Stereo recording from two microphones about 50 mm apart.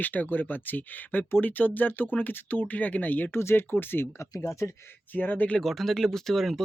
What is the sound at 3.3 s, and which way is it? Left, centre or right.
Speech, left.